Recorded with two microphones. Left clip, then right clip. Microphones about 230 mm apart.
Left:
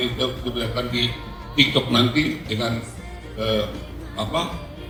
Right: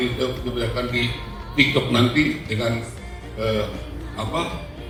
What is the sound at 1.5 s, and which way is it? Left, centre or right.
A man's voice, left.